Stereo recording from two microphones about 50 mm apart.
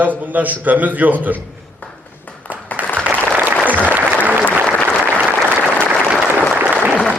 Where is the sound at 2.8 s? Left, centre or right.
Right.